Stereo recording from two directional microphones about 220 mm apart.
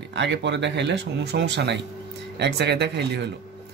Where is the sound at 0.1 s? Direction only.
55° right (ahead or behind).